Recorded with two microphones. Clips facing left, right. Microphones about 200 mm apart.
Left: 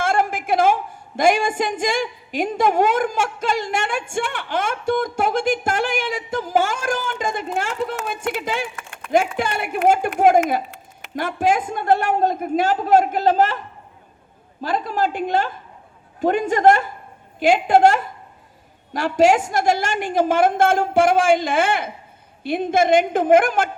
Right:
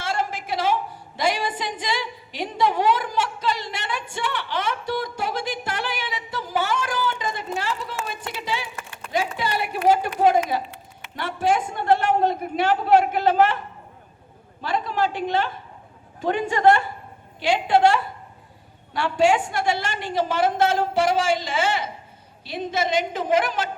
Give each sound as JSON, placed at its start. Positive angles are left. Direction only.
{"t": 0.0, "sound": "a sound", "side_deg": 50}
{"t": 11.8, "sound": "a woman's voice", "side_deg": 50}
{"t": 14.6, "sound": "a woman's voice", "side_deg": 50}